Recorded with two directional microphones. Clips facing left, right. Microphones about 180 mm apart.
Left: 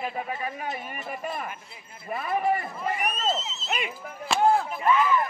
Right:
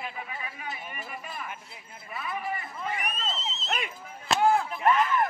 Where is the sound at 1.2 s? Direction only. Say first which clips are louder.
Left 10 dB; 50° left (ahead or behind).